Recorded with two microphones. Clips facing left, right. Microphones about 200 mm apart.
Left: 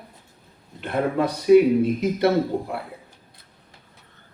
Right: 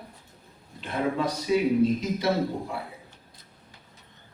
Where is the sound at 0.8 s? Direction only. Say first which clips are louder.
Left 4 dB; 60° left (ahead or behind).